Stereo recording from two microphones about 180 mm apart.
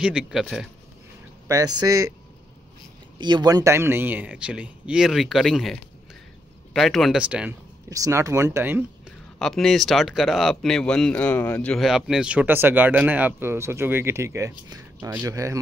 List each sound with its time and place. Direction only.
0.0 s speech: centre (ahead or behind)
1.5 s speech: 20° right (ahead or behind)
3.2 s speech: 25° right (ahead or behind); by 7.5 s 5° right (ahead or behind)
7.9 s speech: 15° right (ahead or behind)
9.4 s speech: centre (ahead or behind); by 15.6 s 20° right (ahead or behind)